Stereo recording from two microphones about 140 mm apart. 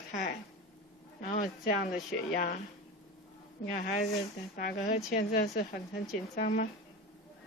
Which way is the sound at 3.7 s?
70° left (ahead or behind).